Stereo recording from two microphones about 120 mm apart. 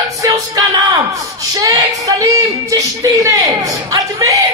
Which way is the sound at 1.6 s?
30° right (ahead or behind).